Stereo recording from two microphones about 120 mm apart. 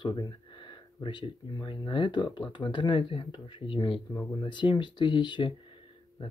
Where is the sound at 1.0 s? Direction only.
45° left (ahead or behind).